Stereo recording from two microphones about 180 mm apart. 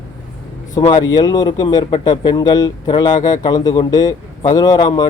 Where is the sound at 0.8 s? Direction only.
25° left (ahead or behind).